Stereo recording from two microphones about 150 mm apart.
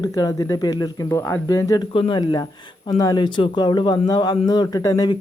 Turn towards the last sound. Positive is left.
turn(degrees=25)  # may be behind; listen again after turning